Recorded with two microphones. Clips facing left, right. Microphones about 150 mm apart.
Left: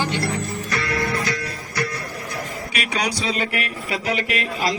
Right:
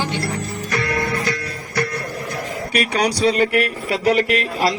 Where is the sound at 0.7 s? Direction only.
50° right (ahead or behind).